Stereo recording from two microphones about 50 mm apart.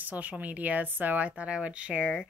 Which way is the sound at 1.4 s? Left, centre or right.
Right.